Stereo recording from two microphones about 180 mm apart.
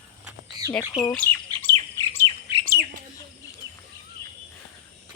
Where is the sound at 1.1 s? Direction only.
10° left (ahead or behind).